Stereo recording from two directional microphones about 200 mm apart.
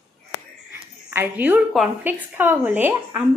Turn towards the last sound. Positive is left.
turn(degrees=-10)  # may be behind; listen again after turning